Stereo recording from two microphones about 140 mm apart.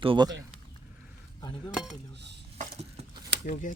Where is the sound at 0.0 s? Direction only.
40° right (ahead or behind).